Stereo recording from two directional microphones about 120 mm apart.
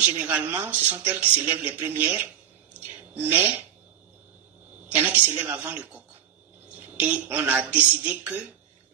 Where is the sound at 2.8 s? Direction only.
15° right (ahead or behind).